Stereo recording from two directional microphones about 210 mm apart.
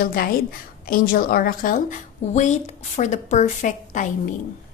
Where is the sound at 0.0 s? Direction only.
45° left (ahead or behind).